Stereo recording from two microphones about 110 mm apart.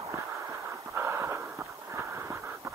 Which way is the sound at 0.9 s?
20° right (ahead or behind).